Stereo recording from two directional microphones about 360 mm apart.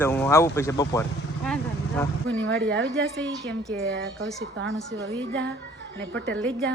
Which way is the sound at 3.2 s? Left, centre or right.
Centre.